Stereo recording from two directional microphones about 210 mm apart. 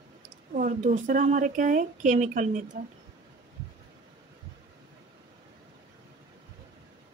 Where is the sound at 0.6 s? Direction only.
40° right (ahead or behind).